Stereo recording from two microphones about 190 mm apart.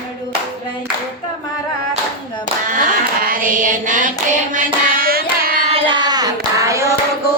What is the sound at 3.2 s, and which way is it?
Music, 50° right (ahead or behind).